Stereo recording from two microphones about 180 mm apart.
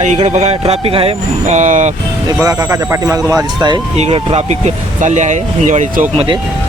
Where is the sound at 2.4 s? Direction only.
15° right (ahead or behind).